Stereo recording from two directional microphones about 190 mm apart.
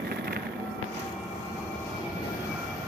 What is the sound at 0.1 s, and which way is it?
Vehicle, 55° right (ahead or behind).